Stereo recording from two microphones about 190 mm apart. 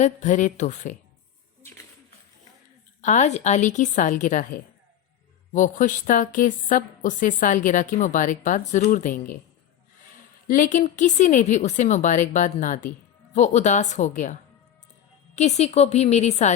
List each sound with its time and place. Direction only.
0.0 s a woman's voice: 40° left (ahead or behind)
3.0 s a woman's voice: 40° left (ahead or behind)
10.5 s a woman's voice: 45° left (ahead or behind)
15.4 s a woman's voice: 35° left (ahead or behind)